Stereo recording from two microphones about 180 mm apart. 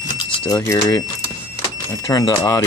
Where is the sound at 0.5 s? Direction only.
20° left (ahead or behind).